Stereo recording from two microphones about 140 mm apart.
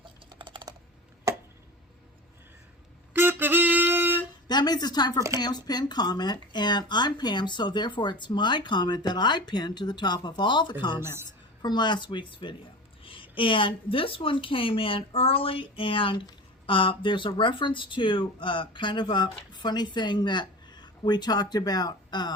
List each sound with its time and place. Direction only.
0.0 s typing: 35° right (ahead or behind)
3.1 s wind instrument: 15° right (ahead or behind)
4.4 s a woman's voice: 30° left (ahead or behind)